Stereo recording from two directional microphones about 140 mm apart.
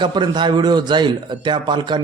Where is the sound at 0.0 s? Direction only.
35° right (ahead or behind).